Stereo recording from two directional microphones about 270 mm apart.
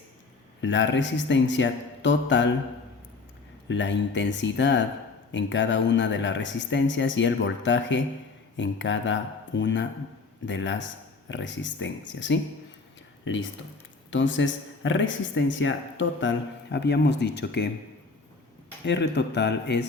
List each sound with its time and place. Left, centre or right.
0.6 s speech: left
3.7 s speech: left
18.9 s speech: left